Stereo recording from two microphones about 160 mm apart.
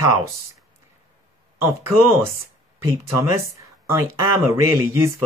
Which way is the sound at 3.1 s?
15° right (ahead or behind).